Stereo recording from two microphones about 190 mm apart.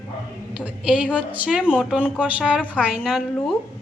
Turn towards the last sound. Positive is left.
turn(degrees=0)  # may be behind; listen again after turning